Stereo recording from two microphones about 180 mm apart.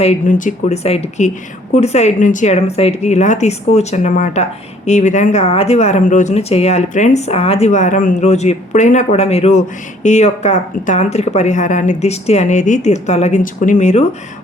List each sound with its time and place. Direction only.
0.0 s speech: 40° left (ahead or behind)